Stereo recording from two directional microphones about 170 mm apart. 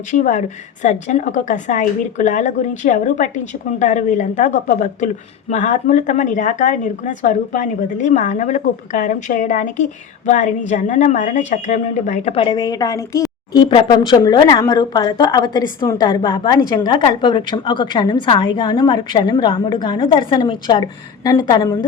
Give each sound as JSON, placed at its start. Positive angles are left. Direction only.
{"t": 0.1, "sound": "a woman's voice", "side_deg": 45}